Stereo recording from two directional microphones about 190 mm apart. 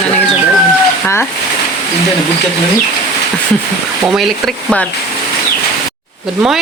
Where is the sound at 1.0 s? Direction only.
15° left (ahead or behind).